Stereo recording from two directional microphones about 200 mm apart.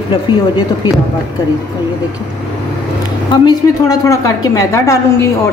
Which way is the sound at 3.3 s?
20° left (ahead or behind).